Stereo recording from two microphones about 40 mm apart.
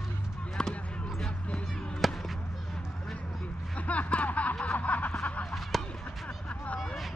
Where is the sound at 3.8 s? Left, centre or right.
Left.